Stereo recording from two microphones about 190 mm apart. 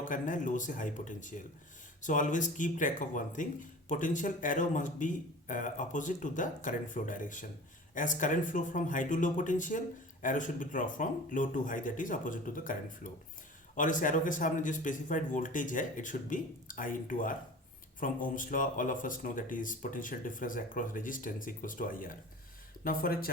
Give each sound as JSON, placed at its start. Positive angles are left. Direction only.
{"t": 0.0, "sound": "speech", "side_deg": 45}
{"t": 13.7, "sound": "speech", "side_deg": 45}